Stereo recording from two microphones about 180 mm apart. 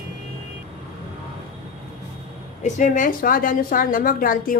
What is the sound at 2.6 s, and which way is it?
A woman's voice, 45° left (ahead or behind).